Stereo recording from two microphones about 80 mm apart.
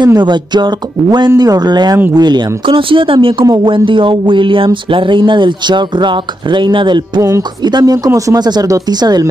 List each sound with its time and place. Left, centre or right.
0.0 s speech: right
7.2 s speech: right
7.6 s speech: right
8.4 s speech: right